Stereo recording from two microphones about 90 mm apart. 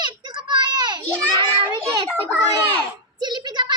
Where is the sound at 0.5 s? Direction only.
55° right (ahead or behind).